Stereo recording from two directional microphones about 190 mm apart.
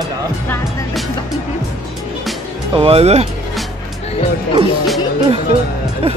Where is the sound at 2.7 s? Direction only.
30° right (ahead or behind).